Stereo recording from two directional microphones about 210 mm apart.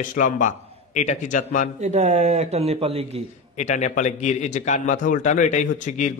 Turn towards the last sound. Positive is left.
turn(degrees=35)  # may be behind; listen again after turning